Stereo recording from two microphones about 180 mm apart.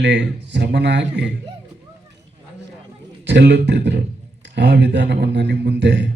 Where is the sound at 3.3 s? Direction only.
70° right (ahead or behind).